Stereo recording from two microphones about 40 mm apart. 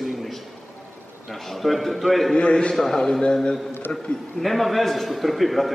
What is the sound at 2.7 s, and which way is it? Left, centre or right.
Speech, centre.